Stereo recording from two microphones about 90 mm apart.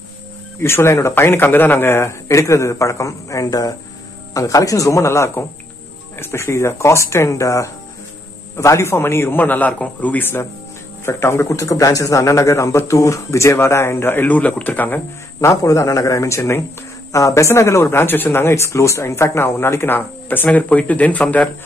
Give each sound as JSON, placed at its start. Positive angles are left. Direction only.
{"t": 0.6, "sound": "speech", "side_deg": 25}
{"t": 15.4, "sound": "speech", "side_deg": 35}